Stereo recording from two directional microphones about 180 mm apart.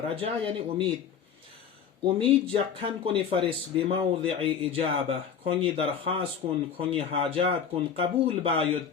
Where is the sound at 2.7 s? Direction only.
30° right (ahead or behind).